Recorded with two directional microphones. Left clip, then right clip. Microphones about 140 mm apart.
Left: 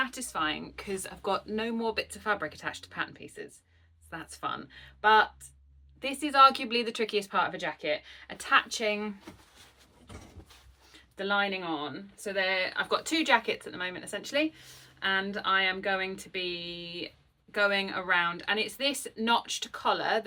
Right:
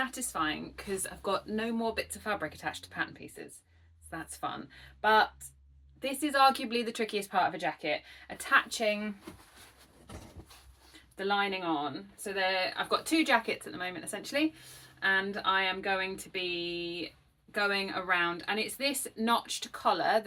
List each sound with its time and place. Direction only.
0.0 s speech: 25° left (ahead or behind)
11.2 s speech: 25° left (ahead or behind)